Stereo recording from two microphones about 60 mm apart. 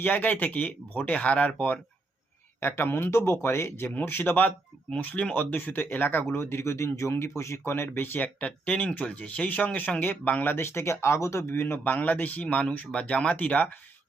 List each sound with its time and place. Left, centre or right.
0.0 s speech: left
2.6 s speech: left
6.3 s speech: left
10.5 s speech: left
11.5 s speech: left